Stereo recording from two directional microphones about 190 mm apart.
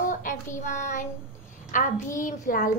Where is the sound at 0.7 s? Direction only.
40° left (ahead or behind).